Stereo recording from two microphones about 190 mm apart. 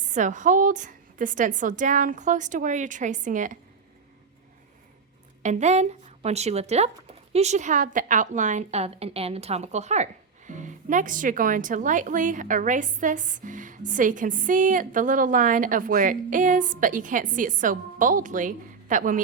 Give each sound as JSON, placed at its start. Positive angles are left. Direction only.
{"t": 0.1, "sound": "a woman's voice", "side_deg": -40}
{"t": 5.4, "sound": "a woman's voice", "side_deg": -40}